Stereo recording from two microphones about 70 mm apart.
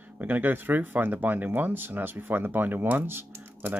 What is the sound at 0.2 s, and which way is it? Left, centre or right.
Speech, right.